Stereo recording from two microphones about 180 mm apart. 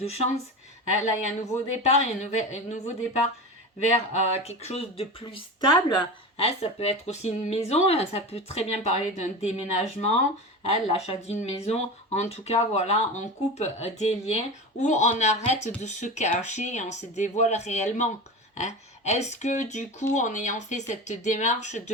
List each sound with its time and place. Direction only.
0.0 s speech: 35° left (ahead or behind)